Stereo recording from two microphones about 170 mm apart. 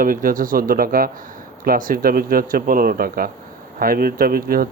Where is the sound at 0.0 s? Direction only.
55° right (ahead or behind).